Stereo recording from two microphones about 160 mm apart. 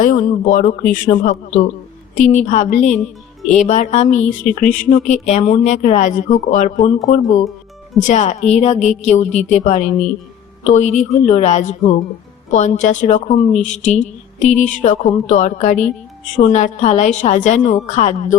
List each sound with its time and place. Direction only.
0.0 s speech: 55° left (ahead or behind)
1.3 s a woman's voice: 50° left (ahead or behind)
8.0 s speech: 45° left (ahead or behind)